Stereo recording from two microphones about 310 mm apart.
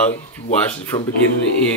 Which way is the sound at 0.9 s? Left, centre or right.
Centre.